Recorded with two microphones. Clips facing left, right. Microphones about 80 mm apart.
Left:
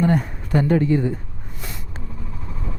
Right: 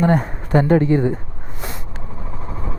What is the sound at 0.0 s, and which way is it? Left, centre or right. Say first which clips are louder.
A woman's voice: right 3 dB; right.